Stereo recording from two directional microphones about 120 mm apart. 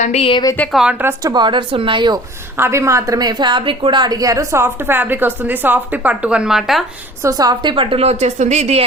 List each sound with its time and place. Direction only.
0.0 s a woman's voice: 65° left (ahead or behind)
0.7 s a woman's voice: 5° right (ahead or behind)
1.2 s speech: 35° right (ahead or behind)
2.6 s a woman's voice: 20° right (ahead or behind); by 6.8 s centre (ahead or behind)
7.2 s a woman's voice: 30° right (ahead or behind); by 8.8 s 65° right (ahead or behind)